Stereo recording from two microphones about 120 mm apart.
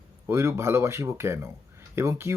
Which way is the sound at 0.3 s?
20° right (ahead or behind).